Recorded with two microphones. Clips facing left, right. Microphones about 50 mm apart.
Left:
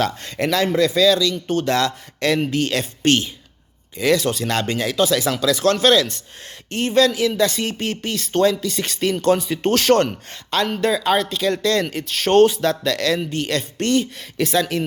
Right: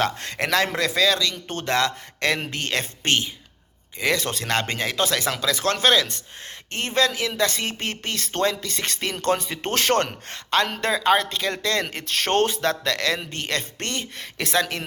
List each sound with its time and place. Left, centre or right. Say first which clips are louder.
0.2 s speech: left 2 dB; right
4.4 s speech: left 3 dB; right
5.4 s speech: left 5 dB; right
10.6 s speech: left 5 dB; right
11.0 s speech: left 2 dB; right
11.5 s speech: left 5 dB; right
11.9 s speech: left 9 dB; right
14.4 s speech: left 4 dB; right